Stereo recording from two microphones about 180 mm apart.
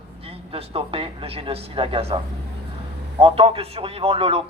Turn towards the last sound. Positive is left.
turn(degrees=-35)  # may be behind; listen again after turning